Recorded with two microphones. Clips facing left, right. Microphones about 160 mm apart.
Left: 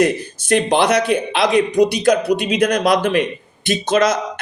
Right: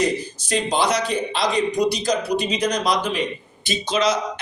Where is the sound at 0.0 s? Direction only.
60° left (ahead or behind).